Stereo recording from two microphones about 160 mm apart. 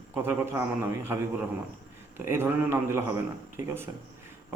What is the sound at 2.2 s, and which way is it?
Speech, 15° right (ahead or behind).